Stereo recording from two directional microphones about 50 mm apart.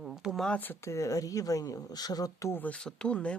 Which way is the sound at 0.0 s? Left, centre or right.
Centre.